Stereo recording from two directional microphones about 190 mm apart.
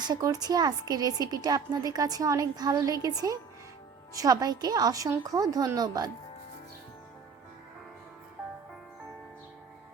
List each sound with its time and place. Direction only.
0.1 s a woman's voice: 20° right (ahead or behind)